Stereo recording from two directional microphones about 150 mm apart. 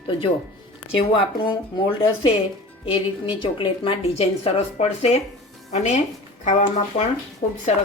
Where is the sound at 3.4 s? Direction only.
35° left (ahead or behind); by 7.6 s 55° left (ahead or behind).